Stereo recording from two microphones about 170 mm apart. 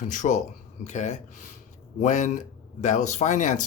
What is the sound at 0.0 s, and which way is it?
Speech, 50° left (ahead or behind).